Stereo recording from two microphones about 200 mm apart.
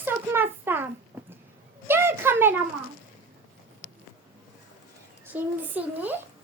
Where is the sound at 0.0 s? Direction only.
10° right (ahead or behind).